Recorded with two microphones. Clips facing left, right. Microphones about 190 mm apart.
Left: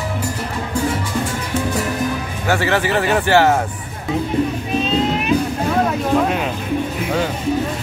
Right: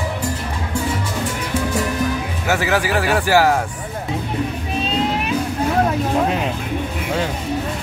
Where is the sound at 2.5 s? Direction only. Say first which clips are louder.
Left 1 dB; 5° right (ahead or behind).